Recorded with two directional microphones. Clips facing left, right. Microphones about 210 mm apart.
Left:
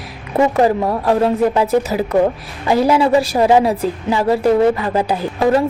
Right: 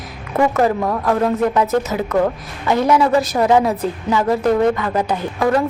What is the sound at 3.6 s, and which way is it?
Speech, 15° left (ahead or behind).